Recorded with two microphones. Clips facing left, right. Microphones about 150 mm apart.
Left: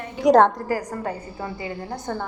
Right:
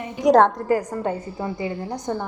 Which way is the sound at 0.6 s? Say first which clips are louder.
Right 4 dB; 25° right (ahead or behind).